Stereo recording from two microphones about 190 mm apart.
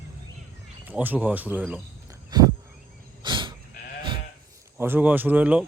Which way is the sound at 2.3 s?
20° right (ahead or behind).